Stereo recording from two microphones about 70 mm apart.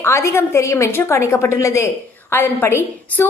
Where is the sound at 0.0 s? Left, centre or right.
Left.